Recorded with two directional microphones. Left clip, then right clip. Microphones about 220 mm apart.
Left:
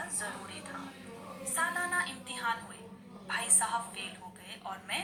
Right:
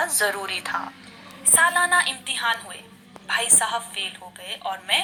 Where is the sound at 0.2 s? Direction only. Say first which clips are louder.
Right 17 dB; 45° right (ahead or behind).